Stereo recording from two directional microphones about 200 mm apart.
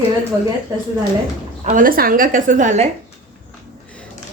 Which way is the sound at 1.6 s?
40° right (ahead or behind).